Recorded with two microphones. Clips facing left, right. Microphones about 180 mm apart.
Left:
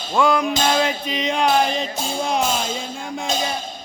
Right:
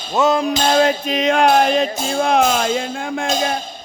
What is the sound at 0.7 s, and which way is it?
Music, 45° right (ahead or behind).